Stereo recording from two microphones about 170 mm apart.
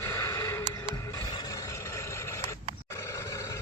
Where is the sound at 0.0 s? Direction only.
15° left (ahead or behind).